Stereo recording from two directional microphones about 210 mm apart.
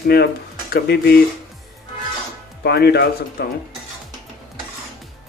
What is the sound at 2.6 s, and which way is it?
Speech, 50° left (ahead or behind).